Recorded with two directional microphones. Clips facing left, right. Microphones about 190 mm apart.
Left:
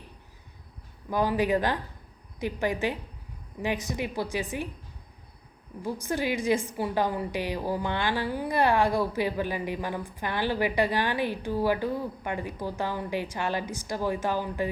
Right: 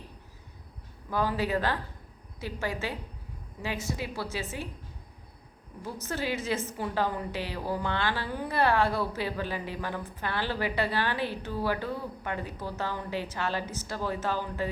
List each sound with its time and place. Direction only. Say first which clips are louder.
1.1 s a woman's voice: left 4 dB; 15° left (ahead or behind)
5.8 s a woman's voice: left 4 dB; 15° left (ahead or behind)